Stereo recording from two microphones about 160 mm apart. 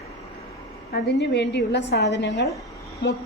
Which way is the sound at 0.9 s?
80° left.